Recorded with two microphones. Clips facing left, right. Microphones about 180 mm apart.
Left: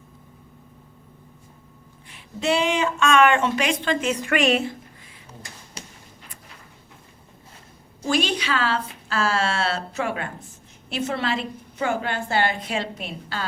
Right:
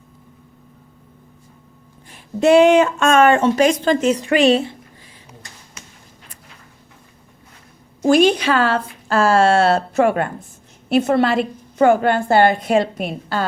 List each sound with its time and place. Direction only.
2.0 s speech: 45° right (ahead or behind); by 4.8 s 30° right (ahead or behind)
5.8 s a sound: 35° left (ahead or behind)
8.0 s a woman's voice: 55° right (ahead or behind)